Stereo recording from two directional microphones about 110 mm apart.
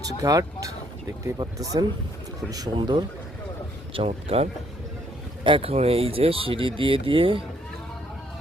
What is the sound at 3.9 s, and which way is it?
Speech, 65° right (ahead or behind).